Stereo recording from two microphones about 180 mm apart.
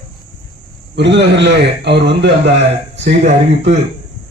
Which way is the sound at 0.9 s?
75° right (ahead or behind).